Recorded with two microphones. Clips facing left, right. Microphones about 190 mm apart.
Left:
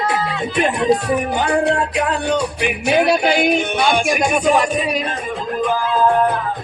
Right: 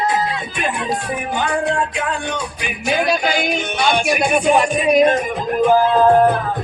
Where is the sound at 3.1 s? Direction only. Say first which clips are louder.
Left 4 dB; 60° left (ahead or behind); by 4.3 s 45° left (ahead or behind).